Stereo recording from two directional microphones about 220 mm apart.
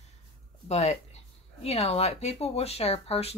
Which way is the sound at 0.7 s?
30° left (ahead or behind).